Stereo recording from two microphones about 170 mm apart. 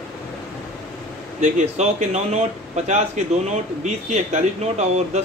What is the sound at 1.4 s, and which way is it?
Speech, 45° right (ahead or behind).